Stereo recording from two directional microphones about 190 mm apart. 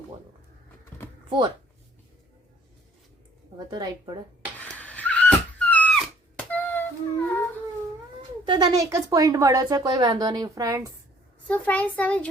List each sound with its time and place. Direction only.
3.7 s speech: 20° right (ahead or behind)
4.6 s a sound: 10° left (ahead or behind)
8.4 s speech: 20° right (ahead or behind)
11.4 s a child's voice: 5° left (ahead or behind)